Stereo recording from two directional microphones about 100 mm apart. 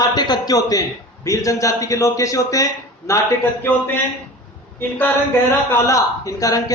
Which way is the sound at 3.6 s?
20° left (ahead or behind).